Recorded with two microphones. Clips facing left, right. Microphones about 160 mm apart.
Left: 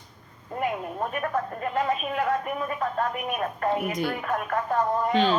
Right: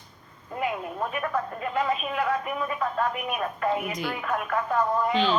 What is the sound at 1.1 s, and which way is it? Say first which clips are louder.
Speech: left 1 dB; 45° left (ahead or behind).